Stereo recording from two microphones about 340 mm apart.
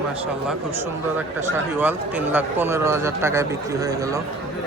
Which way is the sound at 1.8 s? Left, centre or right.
Centre.